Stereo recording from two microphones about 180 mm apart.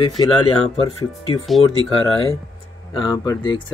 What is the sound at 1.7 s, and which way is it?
Speech, 30° left (ahead or behind).